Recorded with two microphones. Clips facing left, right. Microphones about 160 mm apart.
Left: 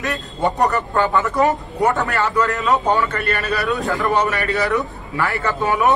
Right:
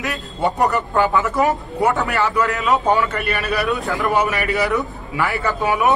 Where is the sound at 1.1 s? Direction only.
Centre (ahead or behind); by 4.7 s 15° right (ahead or behind).